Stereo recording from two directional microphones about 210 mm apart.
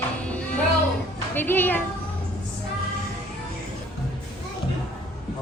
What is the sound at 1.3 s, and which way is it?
Music, 10° left (ahead or behind).